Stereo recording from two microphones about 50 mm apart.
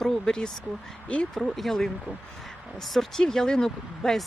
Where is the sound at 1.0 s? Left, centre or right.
Left.